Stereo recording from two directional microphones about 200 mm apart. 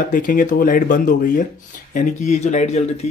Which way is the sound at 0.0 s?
40° left (ahead or behind).